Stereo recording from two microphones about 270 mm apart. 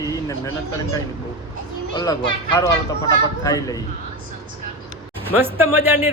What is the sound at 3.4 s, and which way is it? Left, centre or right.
Speech, centre.